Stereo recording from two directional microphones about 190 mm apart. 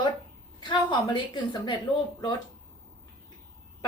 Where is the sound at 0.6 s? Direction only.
25° left (ahead or behind).